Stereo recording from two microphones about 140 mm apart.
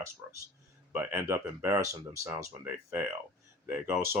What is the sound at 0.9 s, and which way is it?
Speech, 15° right (ahead or behind).